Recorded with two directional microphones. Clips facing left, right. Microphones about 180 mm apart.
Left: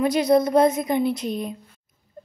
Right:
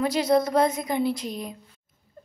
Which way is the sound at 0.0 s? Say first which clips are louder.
Left 3 dB; 20° left (ahead or behind).